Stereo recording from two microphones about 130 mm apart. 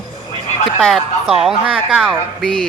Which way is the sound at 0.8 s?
Centre (ahead or behind).